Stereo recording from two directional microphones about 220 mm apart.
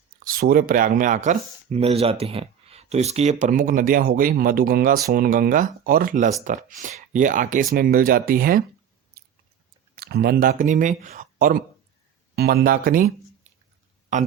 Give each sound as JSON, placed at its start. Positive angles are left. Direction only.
{"t": 0.3, "sound": "speech", "side_deg": -40}
{"t": 9.9, "sound": "speech", "side_deg": -45}